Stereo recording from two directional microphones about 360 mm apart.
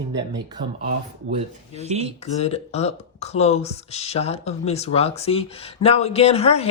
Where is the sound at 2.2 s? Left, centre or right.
Centre.